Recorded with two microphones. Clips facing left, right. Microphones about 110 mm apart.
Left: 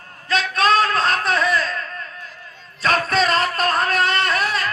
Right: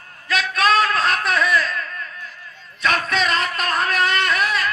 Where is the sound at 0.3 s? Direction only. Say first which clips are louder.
Left 1 dB; 30° left (ahead or behind).